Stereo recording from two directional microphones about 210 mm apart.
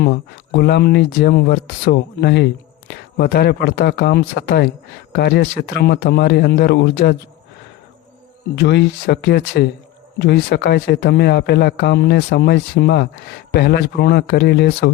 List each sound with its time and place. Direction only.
0.0 s speech: 50° left (ahead or behind)
8.5 s speech: 55° left (ahead or behind)